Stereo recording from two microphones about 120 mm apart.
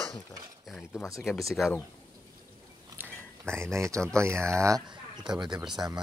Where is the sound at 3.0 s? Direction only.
20° right (ahead or behind).